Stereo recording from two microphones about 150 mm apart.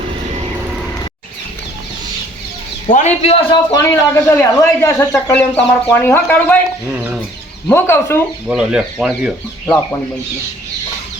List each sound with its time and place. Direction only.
2.8 s a man's voice: 50° left (ahead or behind)
3.5 s speech: 20° left (ahead or behind)
6.9 s chicken: 10° right (ahead or behind)
7.7 s speech: 15° left (ahead or behind)
8.4 s speech: 5° right (ahead or behind)